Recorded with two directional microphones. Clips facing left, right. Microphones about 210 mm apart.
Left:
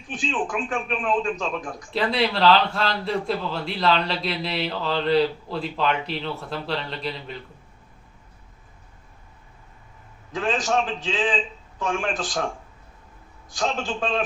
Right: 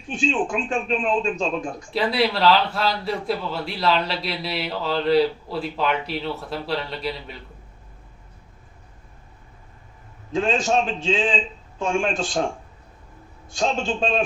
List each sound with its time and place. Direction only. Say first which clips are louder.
0.1 s speech: right 4 dB; 25° right (ahead or behind)
1.9 s a man's voice: right 1 dB; 5° right (ahead or behind)
10.3 s speech: right 3 dB; 25° right (ahead or behind)
13.5 s speech: right 3 dB; 25° right (ahead or behind)